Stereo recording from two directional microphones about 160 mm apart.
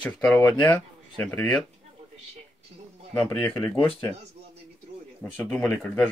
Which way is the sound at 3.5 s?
25° left (ahead or behind).